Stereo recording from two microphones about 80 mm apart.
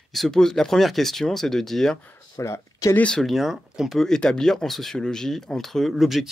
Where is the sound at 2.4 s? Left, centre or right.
Left.